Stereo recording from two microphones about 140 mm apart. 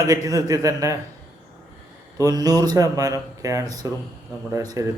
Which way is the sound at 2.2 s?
25° right (ahead or behind).